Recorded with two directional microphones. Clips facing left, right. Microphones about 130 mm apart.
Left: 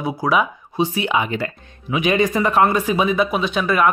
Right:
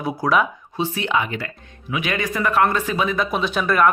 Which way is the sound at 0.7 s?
15° left (ahead or behind).